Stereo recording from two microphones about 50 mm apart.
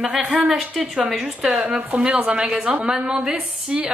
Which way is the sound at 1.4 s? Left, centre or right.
Right.